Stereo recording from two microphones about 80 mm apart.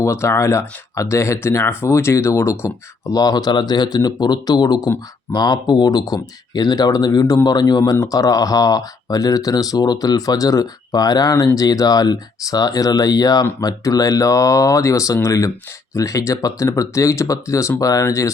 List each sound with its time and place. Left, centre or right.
0.0 s speech: left